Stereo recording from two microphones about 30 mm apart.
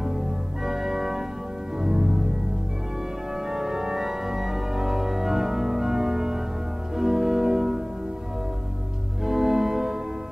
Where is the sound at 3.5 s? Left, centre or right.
Centre.